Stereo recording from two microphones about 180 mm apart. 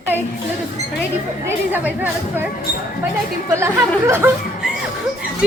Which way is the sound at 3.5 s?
15° right (ahead or behind).